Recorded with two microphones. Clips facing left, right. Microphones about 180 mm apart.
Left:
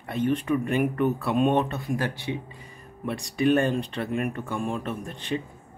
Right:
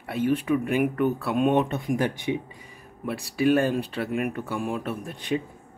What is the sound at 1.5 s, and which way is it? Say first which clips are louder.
Speech: right 2 dB; 20° right (ahead or behind).